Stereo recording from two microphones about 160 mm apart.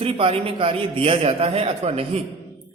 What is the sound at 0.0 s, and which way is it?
A man's voice, 35° right (ahead or behind).